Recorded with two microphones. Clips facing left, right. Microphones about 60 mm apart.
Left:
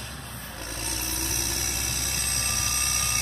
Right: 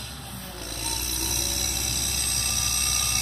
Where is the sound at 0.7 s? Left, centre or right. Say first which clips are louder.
Left 1 dB; left.